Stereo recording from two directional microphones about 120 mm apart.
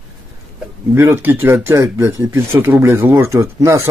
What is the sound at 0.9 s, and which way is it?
Speech, 20° right (ahead or behind).